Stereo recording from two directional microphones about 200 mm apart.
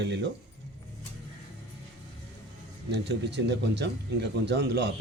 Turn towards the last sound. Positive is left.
turn(degrees=-55)  # may be behind; listen again after turning